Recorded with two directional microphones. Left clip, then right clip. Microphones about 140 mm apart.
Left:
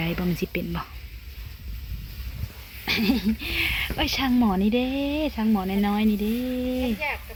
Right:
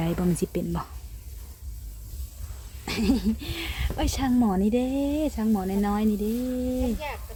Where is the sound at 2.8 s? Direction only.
20° right (ahead or behind); by 7.2 s centre (ahead or behind).